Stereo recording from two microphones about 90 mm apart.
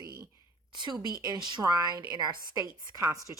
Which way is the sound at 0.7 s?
55° right (ahead or behind).